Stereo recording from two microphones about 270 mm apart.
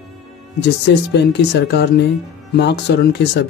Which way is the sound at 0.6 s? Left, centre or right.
Left.